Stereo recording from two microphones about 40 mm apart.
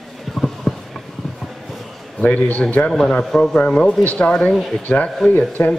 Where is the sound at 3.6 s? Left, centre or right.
Left.